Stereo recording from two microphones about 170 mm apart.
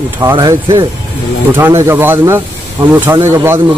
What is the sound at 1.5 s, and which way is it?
Speech, 15° right (ahead or behind).